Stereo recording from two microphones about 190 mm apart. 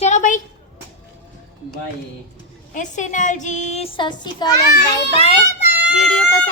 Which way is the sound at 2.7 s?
40° left (ahead or behind).